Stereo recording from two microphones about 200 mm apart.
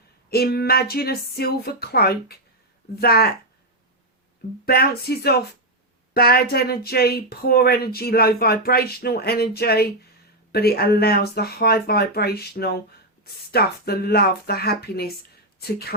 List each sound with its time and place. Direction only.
0.3 s speech: 50° left (ahead or behind)
4.6 s speech: 50° left (ahead or behind)